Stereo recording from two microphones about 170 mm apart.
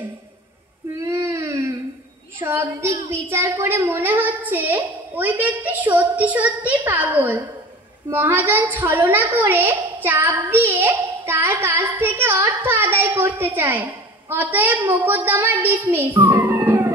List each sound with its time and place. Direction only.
0.9 s a sound: 15° right (ahead or behind)
3.1 s a woman's voice: 15° right (ahead or behind)
16.2 s music: 10° right (ahead or behind)